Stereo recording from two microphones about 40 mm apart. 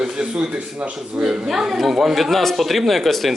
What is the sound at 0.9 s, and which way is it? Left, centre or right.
A woman's voice, centre.